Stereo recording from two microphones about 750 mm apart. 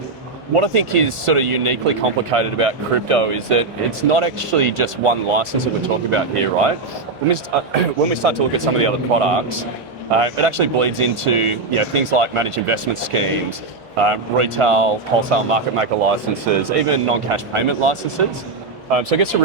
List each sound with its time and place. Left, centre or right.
0.5 s speech: right